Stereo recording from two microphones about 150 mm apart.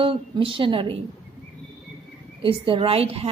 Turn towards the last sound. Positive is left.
turn(degrees=-40)  # may be behind; listen again after turning